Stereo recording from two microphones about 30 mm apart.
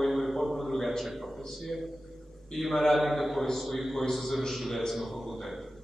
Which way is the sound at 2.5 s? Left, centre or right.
Centre.